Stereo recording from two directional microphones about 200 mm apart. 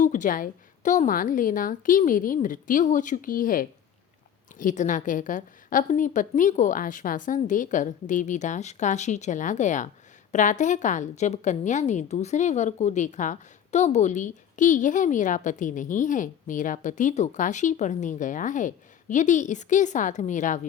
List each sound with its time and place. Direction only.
0.0 s a woman's voice: 40° left (ahead or behind)